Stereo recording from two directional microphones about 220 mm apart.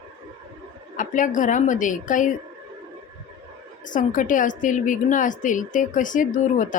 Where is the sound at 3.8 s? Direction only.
35° left (ahead or behind).